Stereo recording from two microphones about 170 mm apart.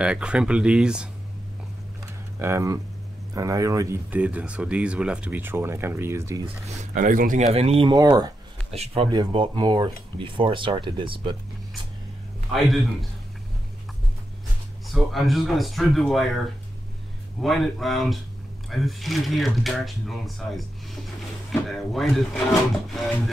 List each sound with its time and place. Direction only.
0.0 s speech: 5° right (ahead or behind)
2.3 s speech: 15° right (ahead or behind)
6.8 s speech: 50° right (ahead or behind); by 8.3 s 25° right (ahead or behind)
8.7 s speech: 35° right (ahead or behind)
12.5 s speech: centre (ahead or behind)
15.0 s speech: centre (ahead or behind)
17.4 s speech: centre (ahead or behind)